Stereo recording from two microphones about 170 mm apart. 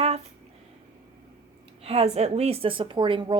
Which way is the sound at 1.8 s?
40° right (ahead or behind).